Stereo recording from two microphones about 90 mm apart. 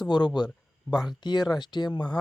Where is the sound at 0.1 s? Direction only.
55° left (ahead or behind).